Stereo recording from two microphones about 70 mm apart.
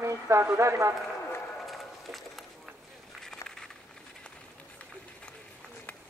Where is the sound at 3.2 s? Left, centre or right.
Centre.